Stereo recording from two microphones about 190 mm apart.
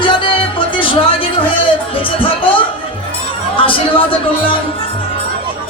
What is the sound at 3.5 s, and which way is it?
Speech, 25° left (ahead or behind).